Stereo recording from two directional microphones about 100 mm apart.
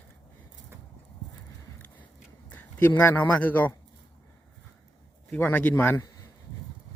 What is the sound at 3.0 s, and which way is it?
Speech, 20° left (ahead or behind).